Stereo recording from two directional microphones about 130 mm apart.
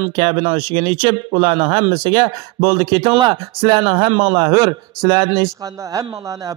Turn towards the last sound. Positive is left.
turn(degrees=-30)  # may be behind; listen again after turning